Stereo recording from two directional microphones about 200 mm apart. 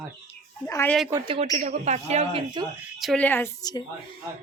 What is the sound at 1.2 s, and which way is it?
A man's voice, 30° right (ahead or behind).